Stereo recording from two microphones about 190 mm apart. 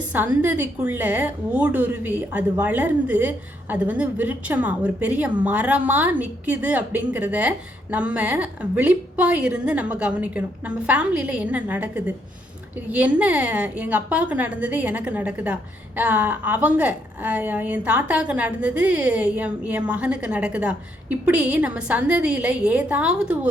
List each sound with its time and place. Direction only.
0.1 s a woman's voice: 10° right (ahead or behind)